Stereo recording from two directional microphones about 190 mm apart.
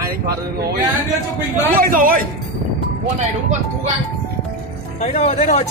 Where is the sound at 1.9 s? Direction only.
50° right (ahead or behind).